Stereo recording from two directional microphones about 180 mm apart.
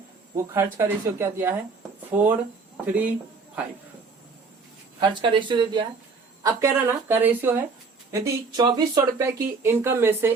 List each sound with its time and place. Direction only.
0.3 s speech: 15° right (ahead or behind)
4.9 s speech: 25° right (ahead or behind)
6.4 s speech: 15° right (ahead or behind)